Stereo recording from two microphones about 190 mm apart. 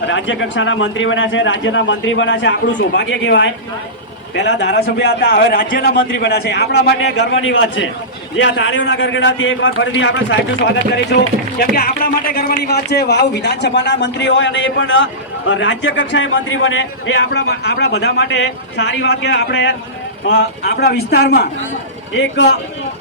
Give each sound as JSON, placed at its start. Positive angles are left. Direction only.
{"t": 0.1, "sound": "a man's voice", "side_deg": 75}
{"t": 11.7, "sound": "a man's voice", "side_deg": 50}
{"t": 22.2, "sound": "speech", "side_deg": 70}